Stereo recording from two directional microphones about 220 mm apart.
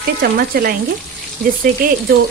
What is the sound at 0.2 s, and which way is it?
Speech, 40° right (ahead or behind).